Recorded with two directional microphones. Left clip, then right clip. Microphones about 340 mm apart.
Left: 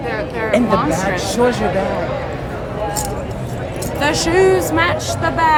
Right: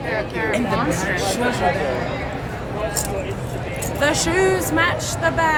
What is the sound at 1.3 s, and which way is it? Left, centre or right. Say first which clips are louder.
Speech: left 5 dB; left.